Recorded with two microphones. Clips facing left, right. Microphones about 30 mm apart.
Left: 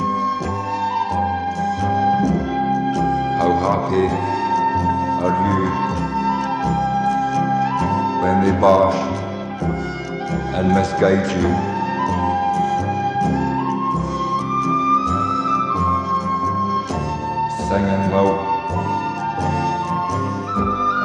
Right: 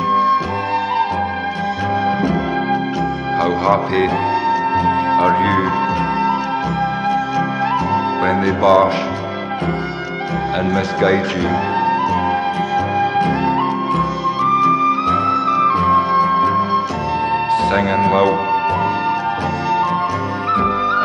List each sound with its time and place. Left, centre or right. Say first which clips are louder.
0.1 s music: right 7 dB; right
3.0 s music: even; right
4.8 s music: right 5 dB; right
7.9 s music: right 2 dB; right
8.5 s speech: right 2 dB; right
10.6 s speech: left 2 dB; right
13.2 s music: right 3 dB; right
14.4 s music: right 9 dB; right
17.6 s speech: right 4 dB; right
18.1 s speech: right 3 dB; right
20.5 s music: right 2 dB; right